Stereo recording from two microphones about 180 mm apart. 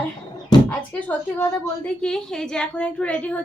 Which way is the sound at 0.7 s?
5° left (ahead or behind).